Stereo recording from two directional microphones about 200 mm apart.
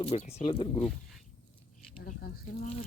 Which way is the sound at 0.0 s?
35° left (ahead or behind).